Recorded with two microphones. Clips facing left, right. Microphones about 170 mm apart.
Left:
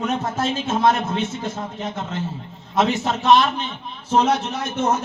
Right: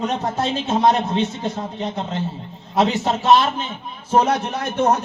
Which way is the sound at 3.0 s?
40° right (ahead or behind).